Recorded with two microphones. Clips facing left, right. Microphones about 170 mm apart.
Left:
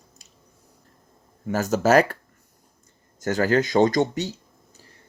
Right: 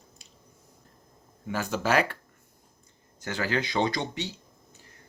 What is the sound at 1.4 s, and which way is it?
Speech, 45° left (ahead or behind).